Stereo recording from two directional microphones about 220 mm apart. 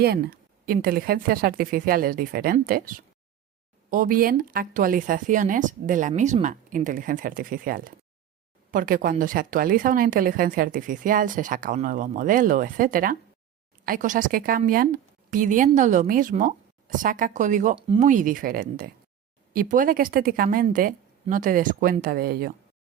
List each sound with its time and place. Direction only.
0.0 s speech: 45° right (ahead or behind)
17.7 s speech: 25° right (ahead or behind)
18.1 s speech: 35° right (ahead or behind)